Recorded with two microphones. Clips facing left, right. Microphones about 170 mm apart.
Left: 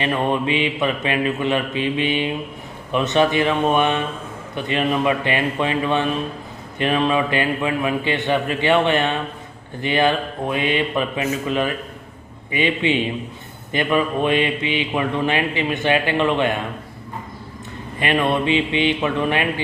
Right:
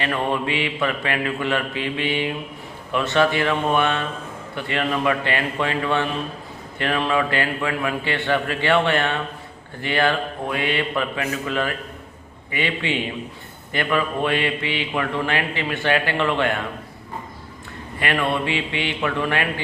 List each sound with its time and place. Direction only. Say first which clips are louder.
0.0 s a man's voice: left 3 dB; 20° left (ahead or behind)
18.0 s speech: left 3 dB; 20° left (ahead or behind)